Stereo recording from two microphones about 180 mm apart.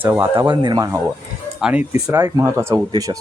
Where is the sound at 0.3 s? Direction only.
25° right (ahead or behind).